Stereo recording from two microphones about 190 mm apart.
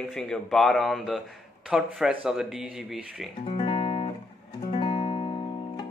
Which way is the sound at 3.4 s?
30° left (ahead or behind).